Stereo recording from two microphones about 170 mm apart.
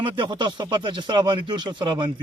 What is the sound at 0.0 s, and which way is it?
Speech, 25° right (ahead or behind).